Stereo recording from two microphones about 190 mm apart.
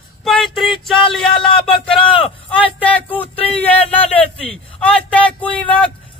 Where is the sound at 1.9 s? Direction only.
25° left (ahead or behind).